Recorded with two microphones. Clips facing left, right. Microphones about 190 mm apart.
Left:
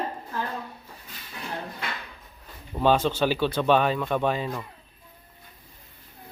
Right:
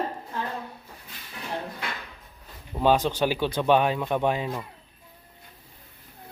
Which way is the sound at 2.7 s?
10° right (ahead or behind).